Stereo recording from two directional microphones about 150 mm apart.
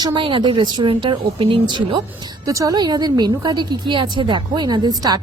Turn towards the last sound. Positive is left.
turn(degrees=-25)  # may be behind; listen again after turning